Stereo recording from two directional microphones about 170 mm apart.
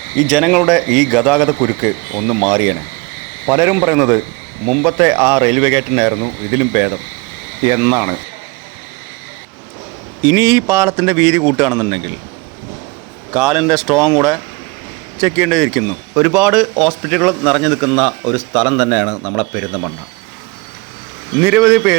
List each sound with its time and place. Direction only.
0.2 s a man's voice: centre (ahead or behind)
3.4 s speech: 15° right (ahead or behind)
10.2 s speech: 15° right (ahead or behind)
13.3 s a man's voice: 5° right (ahead or behind); by 19.8 s 10° left (ahead or behind)
21.4 s speech: 10° right (ahead or behind)